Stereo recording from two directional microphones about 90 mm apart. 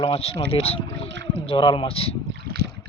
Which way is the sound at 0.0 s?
85° left.